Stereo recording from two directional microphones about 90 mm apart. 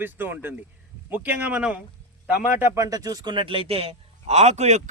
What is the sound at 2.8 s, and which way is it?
Speech, 45° right (ahead or behind).